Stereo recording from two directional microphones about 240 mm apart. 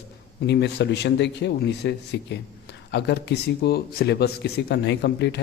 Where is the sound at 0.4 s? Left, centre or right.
Left.